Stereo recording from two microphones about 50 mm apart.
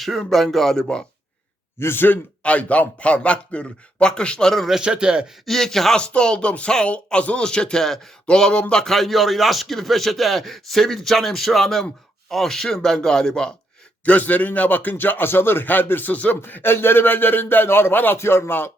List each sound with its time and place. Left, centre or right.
0.2 s speech: centre
1.8 s a man's voice: left
2.4 s a man's voice: left
4.8 s speech: centre
5.5 s speech: centre
6.0 s a man's voice: centre
14.0 s speech: left
16.4 s a man's voice: left